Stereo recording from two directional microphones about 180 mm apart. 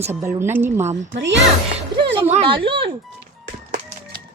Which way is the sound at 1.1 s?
85° right.